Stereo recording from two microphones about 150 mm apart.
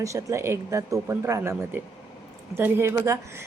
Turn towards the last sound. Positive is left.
turn(degrees=-20)  # may be behind; listen again after turning